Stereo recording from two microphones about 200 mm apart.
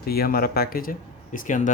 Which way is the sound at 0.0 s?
50° left (ahead or behind).